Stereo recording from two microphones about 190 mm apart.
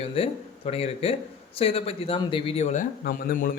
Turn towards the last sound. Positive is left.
turn(degrees=45)  # may be behind; listen again after turning